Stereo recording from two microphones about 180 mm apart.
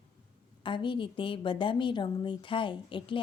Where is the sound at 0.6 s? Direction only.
25° left (ahead or behind).